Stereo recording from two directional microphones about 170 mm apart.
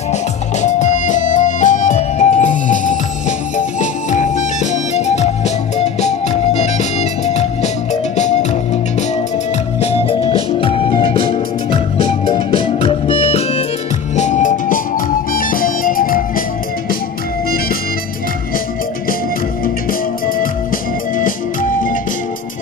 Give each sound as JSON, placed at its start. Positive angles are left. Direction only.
{"t": 0.6, "sound": "music", "side_deg": 45}
{"t": 9.8, "sound": "music", "side_deg": 35}
{"t": 14.1, "sound": "music", "side_deg": 45}
{"t": 19.6, "sound": "music", "side_deg": 55}
{"t": 21.2, "sound": "organ", "side_deg": 55}